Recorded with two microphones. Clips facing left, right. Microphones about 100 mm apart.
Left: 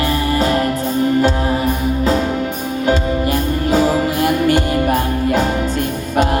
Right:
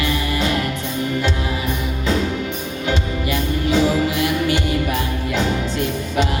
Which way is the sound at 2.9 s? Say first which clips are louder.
Left 6 dB; 40° left (ahead or behind).